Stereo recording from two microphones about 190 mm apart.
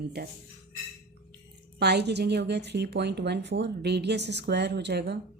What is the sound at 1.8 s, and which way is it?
A woman's voice, 60° right (ahead or behind).